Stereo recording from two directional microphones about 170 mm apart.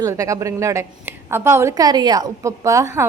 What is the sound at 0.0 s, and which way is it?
A woman's voice, 20° right (ahead or behind).